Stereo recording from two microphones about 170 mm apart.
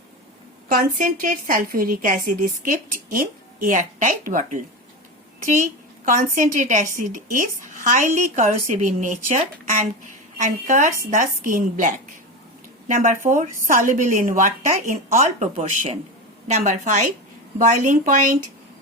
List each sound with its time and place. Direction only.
0.7 s a woman's voice: 55° right (ahead or behind)
6.3 s a woman's voice: 45° right (ahead or behind)